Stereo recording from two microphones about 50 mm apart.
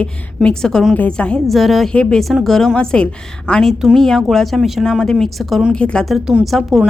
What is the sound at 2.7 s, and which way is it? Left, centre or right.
Speech, centre.